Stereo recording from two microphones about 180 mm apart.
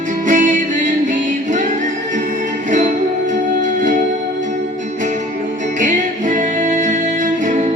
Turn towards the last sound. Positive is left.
turn(degrees=-45)  # may be behind; listen again after turning